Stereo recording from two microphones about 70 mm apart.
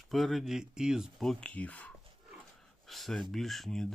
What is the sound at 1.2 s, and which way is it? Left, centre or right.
Speech, centre.